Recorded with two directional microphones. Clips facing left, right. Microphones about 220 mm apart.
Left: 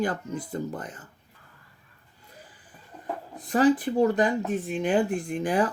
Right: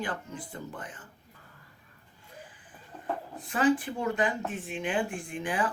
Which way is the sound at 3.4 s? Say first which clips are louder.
Left 5 dB; 40° left (ahead or behind).